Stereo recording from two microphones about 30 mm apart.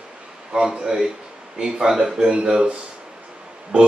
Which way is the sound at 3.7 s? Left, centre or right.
Right.